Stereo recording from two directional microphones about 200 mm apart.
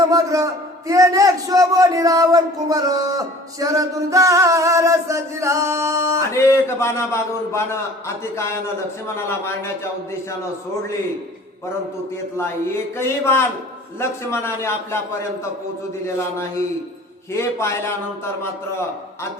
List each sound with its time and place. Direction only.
0.0 s a man's voice: 20° right (ahead or behind)
6.3 s a man's voice: 15° left (ahead or behind)
13.0 s a man's voice: 10° left (ahead or behind)
16.0 s a man's voice: 15° left (ahead or behind)